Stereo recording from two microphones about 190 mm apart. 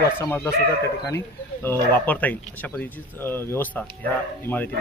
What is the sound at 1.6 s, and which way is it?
Speech, 10° left (ahead or behind).